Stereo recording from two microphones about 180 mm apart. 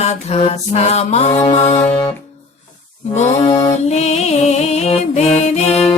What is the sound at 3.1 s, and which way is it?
Music, 35° left (ahead or behind).